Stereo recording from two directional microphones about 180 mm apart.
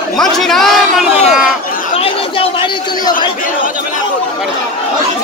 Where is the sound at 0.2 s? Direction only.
Centre (ahead or behind).